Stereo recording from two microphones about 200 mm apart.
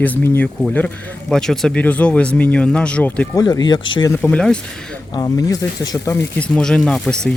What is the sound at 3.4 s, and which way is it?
Speech, 20° left (ahead or behind).